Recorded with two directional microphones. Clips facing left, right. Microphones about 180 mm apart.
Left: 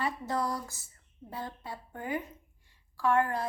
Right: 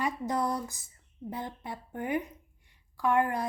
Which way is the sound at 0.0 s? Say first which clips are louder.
Right 2 dB; 20° right (ahead or behind).